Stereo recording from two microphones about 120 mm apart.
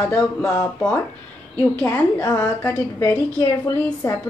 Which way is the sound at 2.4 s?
15° left (ahead or behind).